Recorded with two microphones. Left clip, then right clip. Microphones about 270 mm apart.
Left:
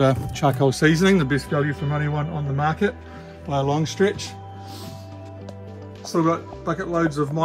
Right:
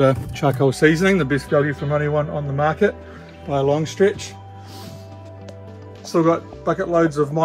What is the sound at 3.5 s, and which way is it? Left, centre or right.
Speech, centre.